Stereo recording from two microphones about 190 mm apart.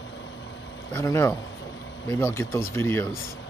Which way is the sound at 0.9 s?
15° left (ahead or behind).